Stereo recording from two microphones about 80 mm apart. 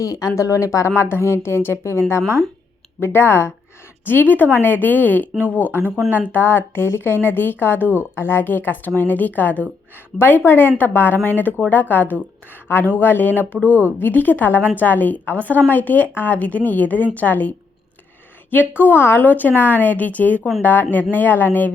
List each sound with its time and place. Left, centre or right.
0.0 s speech: left
18.8 s speech: left